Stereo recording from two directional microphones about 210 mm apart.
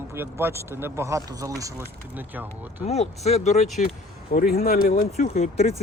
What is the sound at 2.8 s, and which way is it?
Speech, 30° left (ahead or behind).